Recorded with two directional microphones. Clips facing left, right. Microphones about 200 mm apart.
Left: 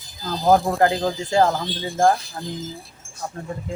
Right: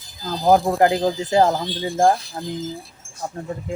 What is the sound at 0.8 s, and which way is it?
Speech, 20° right (ahead or behind).